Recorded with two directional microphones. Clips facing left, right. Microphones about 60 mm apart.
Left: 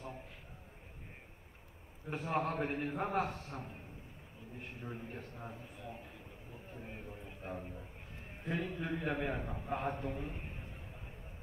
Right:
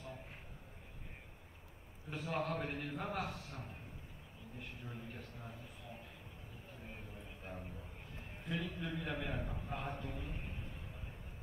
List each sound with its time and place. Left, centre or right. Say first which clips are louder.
2.0 s a man's voice: left 4 dB; left
6.8 s a sound: left 4 dB; left
8.5 s a man's voice: left 4 dB; left